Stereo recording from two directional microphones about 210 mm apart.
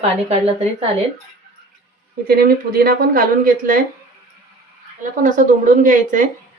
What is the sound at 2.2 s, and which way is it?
Speech, 45° right (ahead or behind).